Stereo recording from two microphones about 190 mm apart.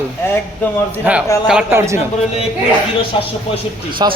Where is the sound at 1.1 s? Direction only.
5° right (ahead or behind).